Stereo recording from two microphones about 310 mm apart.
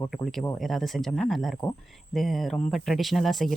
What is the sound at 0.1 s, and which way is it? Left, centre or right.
Speech, centre.